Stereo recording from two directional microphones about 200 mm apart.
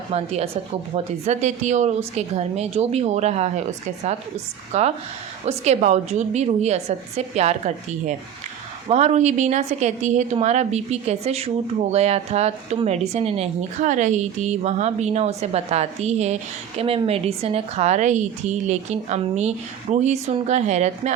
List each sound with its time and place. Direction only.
0.1 s a woman's voice: 30° right (ahead or behind)
8.9 s a woman's voice: 35° right (ahead or behind)